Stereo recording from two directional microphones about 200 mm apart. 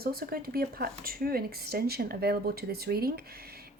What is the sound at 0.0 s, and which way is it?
Speech, 50° right (ahead or behind).